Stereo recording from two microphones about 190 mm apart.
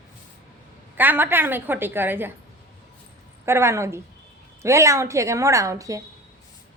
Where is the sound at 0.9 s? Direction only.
10° right (ahead or behind).